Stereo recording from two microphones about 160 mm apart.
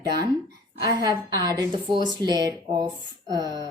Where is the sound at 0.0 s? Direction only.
25° right (ahead or behind).